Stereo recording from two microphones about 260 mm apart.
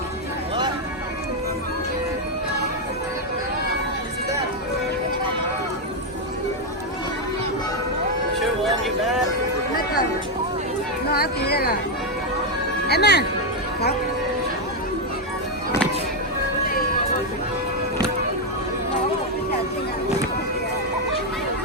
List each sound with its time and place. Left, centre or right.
8.4 s music: centre
11.1 s music: left
12.9 s music: left